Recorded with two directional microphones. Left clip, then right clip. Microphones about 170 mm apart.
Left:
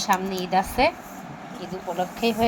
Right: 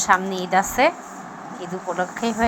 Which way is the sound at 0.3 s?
5° right (ahead or behind).